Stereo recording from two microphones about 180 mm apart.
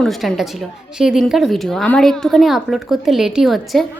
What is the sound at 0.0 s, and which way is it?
A woman's voice, centre (ahead or behind).